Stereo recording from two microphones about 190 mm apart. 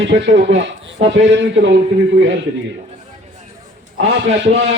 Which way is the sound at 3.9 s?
75° right (ahead or behind).